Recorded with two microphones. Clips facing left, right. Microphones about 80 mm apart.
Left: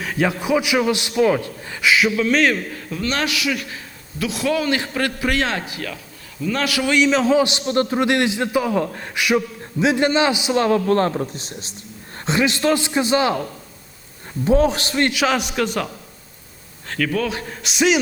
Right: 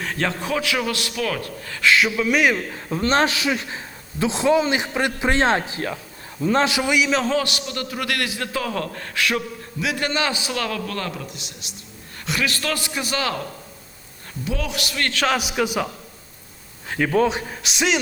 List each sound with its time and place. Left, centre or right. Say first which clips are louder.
0.0 s a man's voice: left 4 dB; centre
1.9 s speech: left 1 dB; centre
2.9 s a man's voice: right 4 dB; right
6.9 s speech: left 8 dB; centre
7.3 s a man's voice: left 5 dB; left
7.7 s a man's voice: left 9 dB; left
14.4 s a man's voice: left 11 dB; left
15.0 s a man's voice: left 3 dB; centre
15.3 s speech: left 1 dB; centre
17.0 s a man's voice: right 3 dB; right
17.5 s speech: left 4 dB; centre